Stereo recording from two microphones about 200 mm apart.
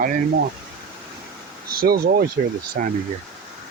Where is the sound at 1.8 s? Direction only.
50° right (ahead or behind).